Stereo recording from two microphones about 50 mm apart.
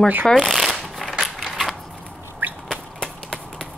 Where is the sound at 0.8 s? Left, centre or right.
Centre.